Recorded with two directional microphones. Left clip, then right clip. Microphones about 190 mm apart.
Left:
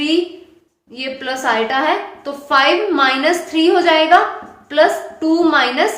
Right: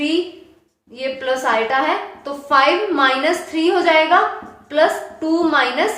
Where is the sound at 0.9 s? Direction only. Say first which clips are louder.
Right 2 dB; 20° left (ahead or behind).